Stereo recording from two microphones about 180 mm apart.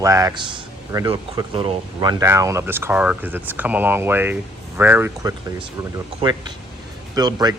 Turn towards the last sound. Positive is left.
turn(degrees=-20)  # may be behind; listen again after turning